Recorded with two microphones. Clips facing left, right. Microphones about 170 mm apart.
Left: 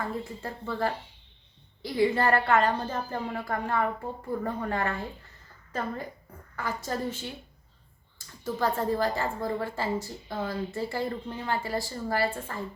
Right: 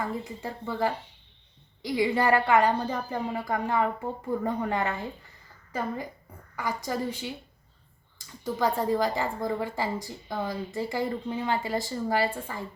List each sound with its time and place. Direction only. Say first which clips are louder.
0.0 s a woman's voice: right 1 dB; 15° right (ahead or behind)
6.6 s a woman's voice: right 1 dB; 15° right (ahead or behind)
8.5 s a woman's voice: right 2 dB; 15° right (ahead or behind)